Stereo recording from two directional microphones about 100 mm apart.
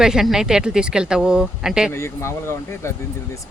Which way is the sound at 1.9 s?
25° left (ahead or behind).